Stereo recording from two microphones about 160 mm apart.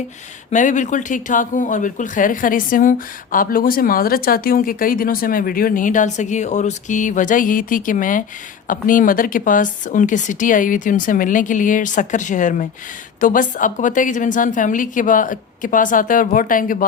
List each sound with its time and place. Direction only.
0.5 s speech: 50° left (ahead or behind)